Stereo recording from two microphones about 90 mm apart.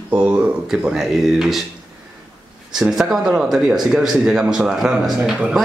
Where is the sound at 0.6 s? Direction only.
10° right (ahead or behind).